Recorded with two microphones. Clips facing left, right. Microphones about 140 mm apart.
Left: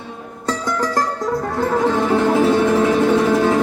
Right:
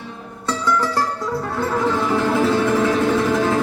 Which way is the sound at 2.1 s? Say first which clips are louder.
Left 4 dB; 25° left (ahead or behind).